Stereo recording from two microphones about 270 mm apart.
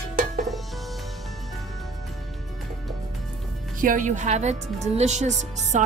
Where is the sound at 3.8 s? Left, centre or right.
Right.